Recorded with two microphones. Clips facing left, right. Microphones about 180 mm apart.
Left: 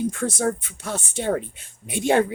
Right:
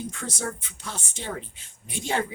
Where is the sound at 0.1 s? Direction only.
50° left (ahead or behind).